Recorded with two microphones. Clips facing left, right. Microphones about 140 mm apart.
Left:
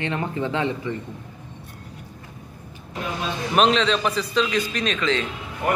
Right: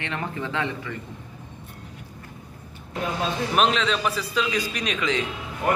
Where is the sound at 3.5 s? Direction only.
5° right (ahead or behind).